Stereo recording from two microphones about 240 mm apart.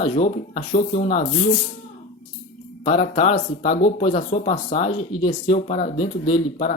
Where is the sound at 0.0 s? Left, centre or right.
Left.